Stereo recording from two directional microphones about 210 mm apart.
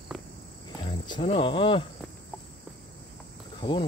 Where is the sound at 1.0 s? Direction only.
25° left (ahead or behind).